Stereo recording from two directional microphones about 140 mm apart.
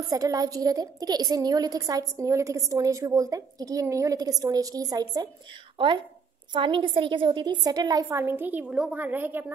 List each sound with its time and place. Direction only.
0.1 s a woman's voice: 25° right (ahead or behind)